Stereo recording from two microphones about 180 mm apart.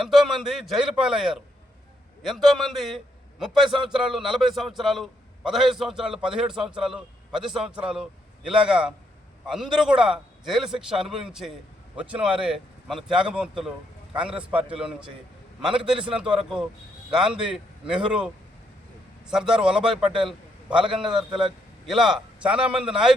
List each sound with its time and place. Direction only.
0.0 s a man's voice: centre (ahead or behind)
16.0 s a man's voice: 5° right (ahead or behind)
19.3 s a man's voice: 5° right (ahead or behind)
21.1 s a man's voice: 25° right (ahead or behind)
21.8 s a man's voice: 5° right (ahead or behind)